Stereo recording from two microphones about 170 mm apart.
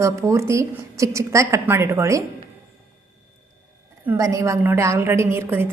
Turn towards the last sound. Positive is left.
turn(degrees=-15)  # may be behind; listen again after turning